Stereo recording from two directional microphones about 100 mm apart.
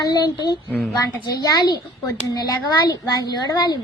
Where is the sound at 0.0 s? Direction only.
45° left (ahead or behind).